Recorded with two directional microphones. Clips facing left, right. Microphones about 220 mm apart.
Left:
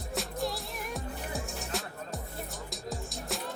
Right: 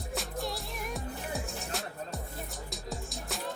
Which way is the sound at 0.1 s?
Centre (ahead or behind).